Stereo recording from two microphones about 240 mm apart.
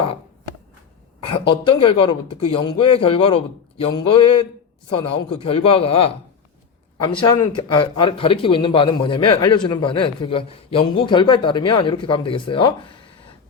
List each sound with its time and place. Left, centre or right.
1.3 s a man's voice: left
7.2 s a man's voice: centre